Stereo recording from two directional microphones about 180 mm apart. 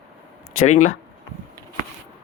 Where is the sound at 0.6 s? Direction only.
45° left (ahead or behind).